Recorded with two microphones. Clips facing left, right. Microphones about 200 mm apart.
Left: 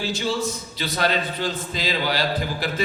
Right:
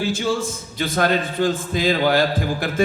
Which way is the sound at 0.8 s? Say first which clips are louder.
Right 4 dB; 50° right (ahead or behind).